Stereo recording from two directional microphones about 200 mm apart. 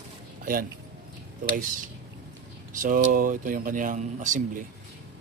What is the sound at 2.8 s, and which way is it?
A man's voice, 40° right (ahead or behind).